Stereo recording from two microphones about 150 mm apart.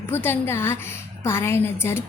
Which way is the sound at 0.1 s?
15° left (ahead or behind).